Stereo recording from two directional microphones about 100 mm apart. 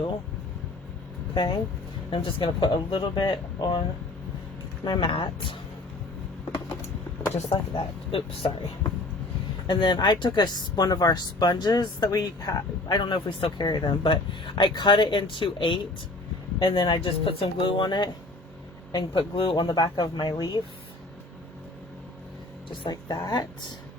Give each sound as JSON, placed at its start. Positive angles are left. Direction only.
{"t": 1.3, "sound": "speech", "side_deg": 50}
{"t": 2.0, "sound": "speech", "side_deg": 60}
{"t": 4.9, "sound": "speech", "side_deg": 55}
{"t": 7.3, "sound": "speech", "side_deg": 60}
{"t": 9.6, "sound": "a woman's voice", "side_deg": 50}
{"t": 22.7, "sound": "a woman's voice", "side_deg": 50}